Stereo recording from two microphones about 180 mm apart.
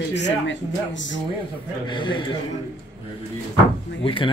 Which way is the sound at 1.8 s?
25° left (ahead or behind).